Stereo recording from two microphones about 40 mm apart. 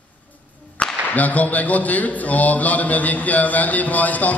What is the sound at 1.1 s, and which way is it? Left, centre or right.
Speech, left.